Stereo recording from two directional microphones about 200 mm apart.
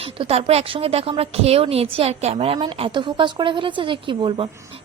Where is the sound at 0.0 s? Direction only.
30° right (ahead or behind).